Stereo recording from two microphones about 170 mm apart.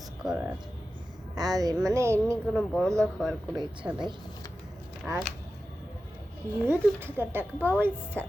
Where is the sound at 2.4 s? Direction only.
Centre (ahead or behind).